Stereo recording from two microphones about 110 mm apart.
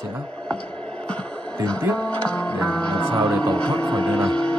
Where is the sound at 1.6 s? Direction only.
10° left (ahead or behind).